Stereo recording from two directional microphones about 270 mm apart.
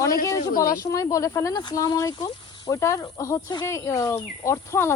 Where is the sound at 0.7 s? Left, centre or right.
Centre.